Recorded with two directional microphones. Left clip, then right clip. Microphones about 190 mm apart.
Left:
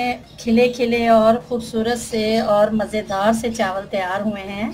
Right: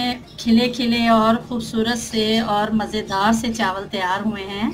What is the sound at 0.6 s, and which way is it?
A woman's voice, 25° left (ahead or behind).